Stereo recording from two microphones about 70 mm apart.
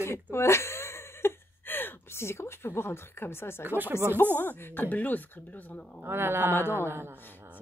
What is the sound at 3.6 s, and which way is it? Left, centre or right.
Speech, right.